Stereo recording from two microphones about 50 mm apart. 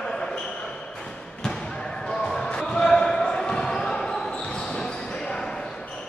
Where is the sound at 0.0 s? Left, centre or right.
Centre.